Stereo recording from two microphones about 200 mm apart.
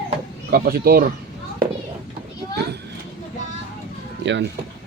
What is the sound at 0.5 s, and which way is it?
Speech, 50° right (ahead or behind).